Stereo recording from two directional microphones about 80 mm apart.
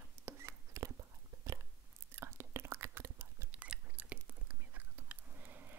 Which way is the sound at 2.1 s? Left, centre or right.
Right.